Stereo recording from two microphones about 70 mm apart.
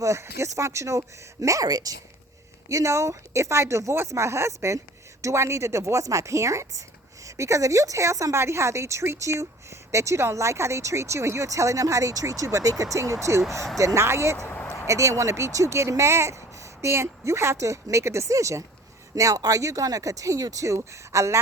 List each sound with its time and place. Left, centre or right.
0.0 s speech: right
2.6 s speech: right